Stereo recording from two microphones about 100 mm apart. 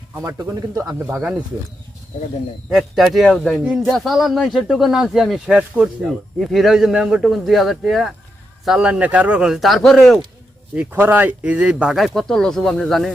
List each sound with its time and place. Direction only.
0.2 s speech: 35° right (ahead or behind)
0.9 s speech: 20° right (ahead or behind)
2.6 s speech: 5° right (ahead or behind)
5.5 s speech: 15° right (ahead or behind)
6.1 s speech: centre (ahead or behind)
10.8 s speech: 20° right (ahead or behind)
11.9 s speech: centre (ahead or behind)